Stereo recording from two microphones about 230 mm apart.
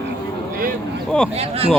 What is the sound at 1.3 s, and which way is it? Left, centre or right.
Speech, right.